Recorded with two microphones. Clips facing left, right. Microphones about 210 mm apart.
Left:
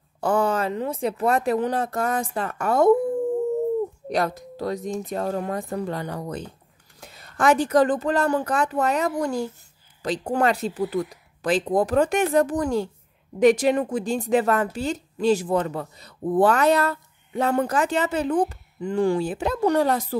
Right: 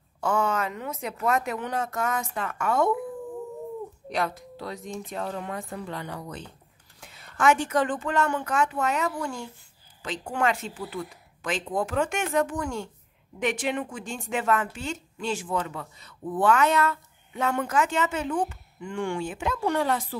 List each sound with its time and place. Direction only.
0.2 s a woman's voice: 35° left (ahead or behind)
4.1 s a woman's voice: 40° left (ahead or behind)